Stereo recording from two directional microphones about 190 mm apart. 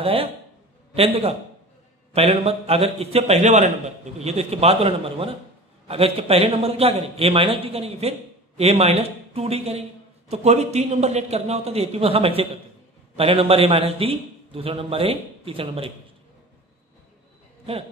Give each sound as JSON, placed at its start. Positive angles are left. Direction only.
{"t": 0.0, "sound": "a man's voice", "side_deg": -30}